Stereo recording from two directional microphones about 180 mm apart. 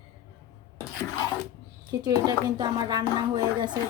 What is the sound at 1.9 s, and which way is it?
A woman's voice, 20° right (ahead or behind).